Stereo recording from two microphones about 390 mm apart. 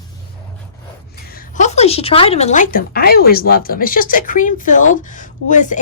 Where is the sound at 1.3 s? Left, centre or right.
Centre.